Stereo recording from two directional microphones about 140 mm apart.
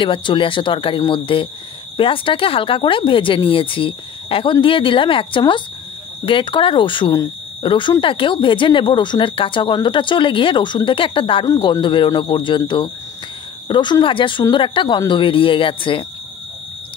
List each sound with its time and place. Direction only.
0.0 s speech: 35° left (ahead or behind)
11.4 s speech: 25° left (ahead or behind)